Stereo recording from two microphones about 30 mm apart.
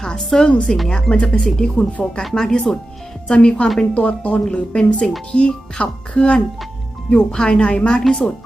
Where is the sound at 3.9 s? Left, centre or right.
Left.